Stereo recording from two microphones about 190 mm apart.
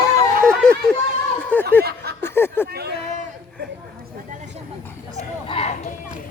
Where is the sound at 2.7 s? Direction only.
55° right (ahead or behind).